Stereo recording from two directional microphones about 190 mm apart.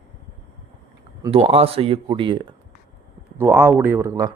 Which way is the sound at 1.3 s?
30° right (ahead or behind).